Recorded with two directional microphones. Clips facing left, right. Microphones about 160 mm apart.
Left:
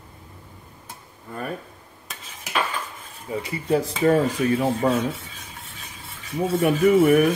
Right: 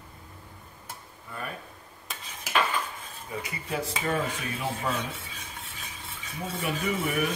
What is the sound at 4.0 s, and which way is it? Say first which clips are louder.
Speech: left 11 dB; 40° left (ahead or behind).